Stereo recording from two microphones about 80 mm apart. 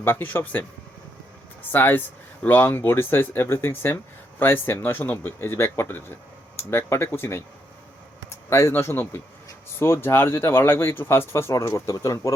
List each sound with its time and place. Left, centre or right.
0.0 s speech: left
1.7 s speech: left
8.4 s speech: left